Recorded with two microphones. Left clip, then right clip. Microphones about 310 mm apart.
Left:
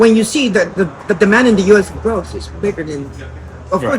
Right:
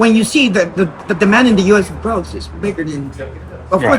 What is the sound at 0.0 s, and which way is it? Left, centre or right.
Speech, centre.